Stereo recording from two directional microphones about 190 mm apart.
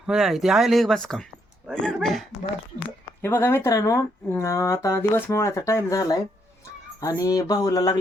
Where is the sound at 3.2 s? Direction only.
10° left (ahead or behind).